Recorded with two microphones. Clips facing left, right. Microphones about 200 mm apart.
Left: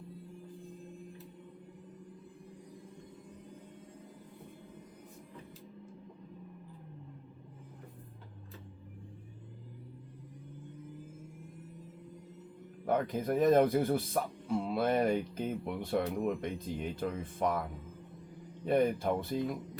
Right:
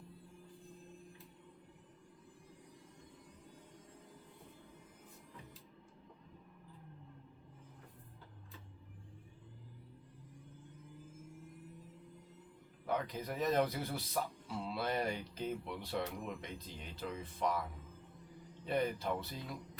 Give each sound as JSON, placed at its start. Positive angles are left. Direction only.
{"t": 12.8, "sound": "speech", "side_deg": 50}
{"t": 18.6, "sound": "speech", "side_deg": 50}